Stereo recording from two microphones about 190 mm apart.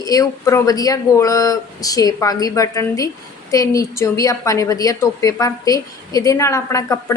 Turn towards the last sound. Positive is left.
turn(degrees=15)  # may be behind; listen again after turning